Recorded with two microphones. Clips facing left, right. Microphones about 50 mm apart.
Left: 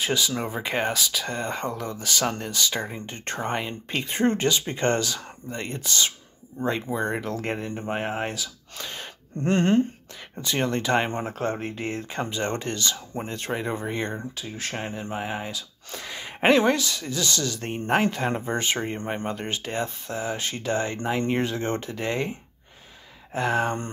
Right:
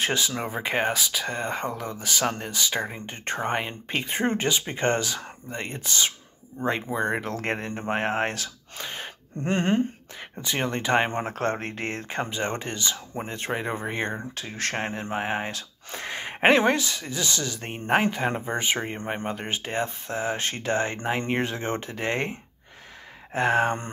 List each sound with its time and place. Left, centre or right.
0.3 s speech: centre
7.2 s speech: right
8.7 s gasp: right
9.4 s a sound: centre
10.4 s speech: centre
11.3 s speech: right
12.1 s speech: right
14.3 s speech: right
15.9 s speech: right
22.1 s speech: right
23.3 s speech: right